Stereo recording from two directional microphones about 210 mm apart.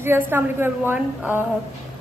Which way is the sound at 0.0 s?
10° right (ahead or behind).